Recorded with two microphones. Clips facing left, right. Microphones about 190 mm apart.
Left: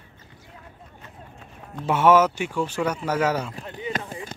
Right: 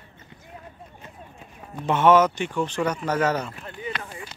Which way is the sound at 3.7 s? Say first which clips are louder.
Left 2 dB; 20° left (ahead or behind).